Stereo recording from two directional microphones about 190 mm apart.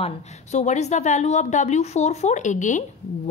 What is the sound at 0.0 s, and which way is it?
A woman's voice, 35° left (ahead or behind).